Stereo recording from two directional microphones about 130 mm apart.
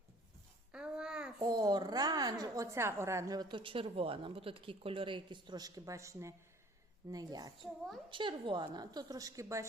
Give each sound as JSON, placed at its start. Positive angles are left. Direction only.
{"t": 0.7, "sound": "babbling", "side_deg": -5}
{"t": 1.4, "sound": "a woman's voice", "side_deg": -30}